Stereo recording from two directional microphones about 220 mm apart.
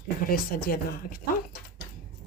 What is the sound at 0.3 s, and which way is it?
Speech, 40° left (ahead or behind).